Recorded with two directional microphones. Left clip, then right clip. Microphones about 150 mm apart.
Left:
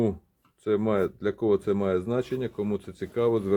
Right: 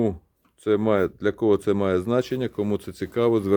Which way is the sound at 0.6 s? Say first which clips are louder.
Right 4 dB; 50° right (ahead or behind).